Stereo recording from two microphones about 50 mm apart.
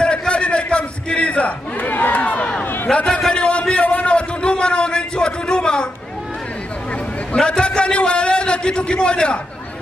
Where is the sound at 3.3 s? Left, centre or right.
Centre.